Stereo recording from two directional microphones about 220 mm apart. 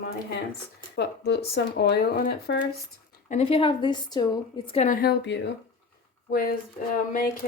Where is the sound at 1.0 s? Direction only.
50° left (ahead or behind).